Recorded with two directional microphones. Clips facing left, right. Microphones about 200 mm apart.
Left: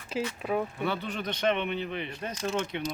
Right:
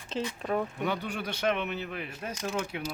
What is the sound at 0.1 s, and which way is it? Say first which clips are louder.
Speech: left 1 dB; 5° left (ahead or behind).